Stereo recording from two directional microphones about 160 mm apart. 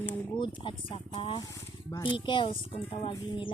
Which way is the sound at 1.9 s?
20° left (ahead or behind).